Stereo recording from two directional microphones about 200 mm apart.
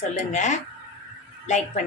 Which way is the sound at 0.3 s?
35° left (ahead or behind).